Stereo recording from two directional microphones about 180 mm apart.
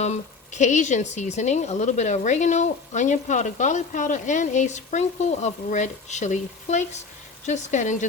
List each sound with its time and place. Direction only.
0.0 s speech: 40° left (ahead or behind)